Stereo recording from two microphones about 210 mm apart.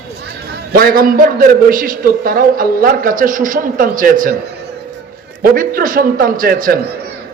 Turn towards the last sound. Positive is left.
turn(degrees=-45)  # may be behind; listen again after turning